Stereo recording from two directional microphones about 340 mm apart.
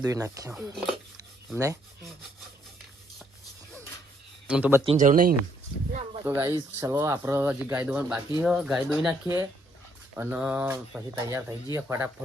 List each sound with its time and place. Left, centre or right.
0.0 s speech: centre
4.4 s speech: centre
4.9 s speech: right
6.2 s speech: centre